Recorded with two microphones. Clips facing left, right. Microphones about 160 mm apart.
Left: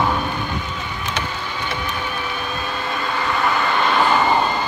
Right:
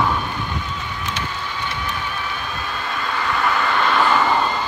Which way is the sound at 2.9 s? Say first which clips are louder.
Even; 10° left (ahead or behind).